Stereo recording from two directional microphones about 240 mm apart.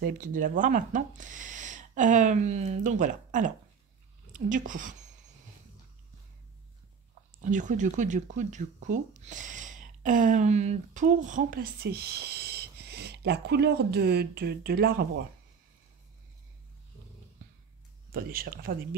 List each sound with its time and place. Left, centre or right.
0.0 s speech: right
7.4 s speech: right
18.1 s speech: right